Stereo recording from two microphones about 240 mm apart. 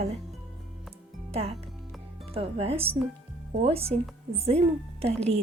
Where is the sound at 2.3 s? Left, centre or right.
Right.